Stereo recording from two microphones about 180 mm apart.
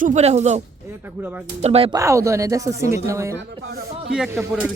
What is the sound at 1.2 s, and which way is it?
Speech, 10° right (ahead or behind).